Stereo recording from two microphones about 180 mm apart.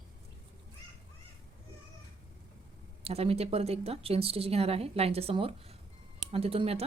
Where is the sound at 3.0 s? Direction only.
35° right (ahead or behind).